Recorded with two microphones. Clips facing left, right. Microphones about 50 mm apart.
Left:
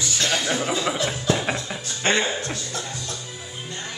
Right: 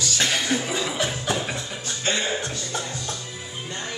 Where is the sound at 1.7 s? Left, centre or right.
Left.